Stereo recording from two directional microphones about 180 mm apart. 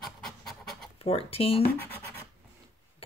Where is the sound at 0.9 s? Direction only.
35° left (ahead or behind).